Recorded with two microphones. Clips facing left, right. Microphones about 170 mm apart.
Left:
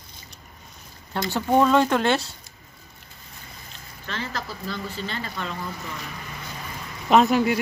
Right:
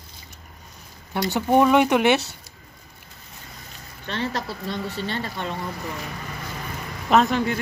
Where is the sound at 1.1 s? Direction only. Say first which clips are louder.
Right 2 dB; 15° right (ahead or behind).